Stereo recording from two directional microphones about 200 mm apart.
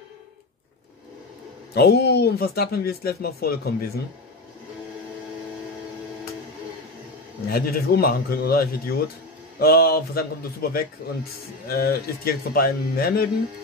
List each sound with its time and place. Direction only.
1.7 s speech: 55° left (ahead or behind)
7.4 s speech: 50° left (ahead or behind)